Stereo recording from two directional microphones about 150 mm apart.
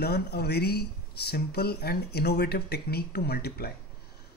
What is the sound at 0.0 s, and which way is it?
Speech, 90° left.